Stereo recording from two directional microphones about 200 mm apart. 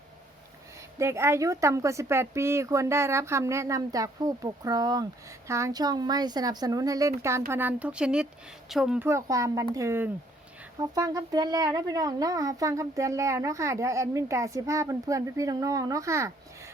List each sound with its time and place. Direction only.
0.9 s a woman's voice: 15° right (ahead or behind)
9.0 s speech: 15° right (ahead or behind)